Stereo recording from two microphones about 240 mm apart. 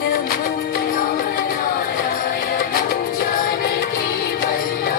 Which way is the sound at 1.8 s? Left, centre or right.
Left.